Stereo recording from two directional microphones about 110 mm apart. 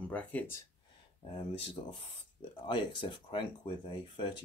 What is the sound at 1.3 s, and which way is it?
Speech, 45° left (ahead or behind).